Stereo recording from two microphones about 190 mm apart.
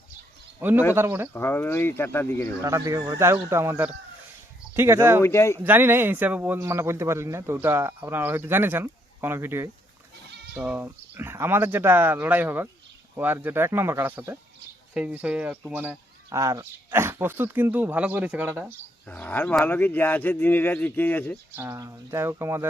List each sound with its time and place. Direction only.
0.6 s a man's voice: 10° right (ahead or behind)
1.3 s speech: 10° left (ahead or behind)
2.6 s a man's voice: 15° right (ahead or behind)
5.2 s speech: 15° left (ahead or behind)
5.6 s a man's voice: 10° right (ahead or behind)
19.0 s speech: 5° left (ahead or behind)
21.5 s a man's voice: 15° right (ahead or behind)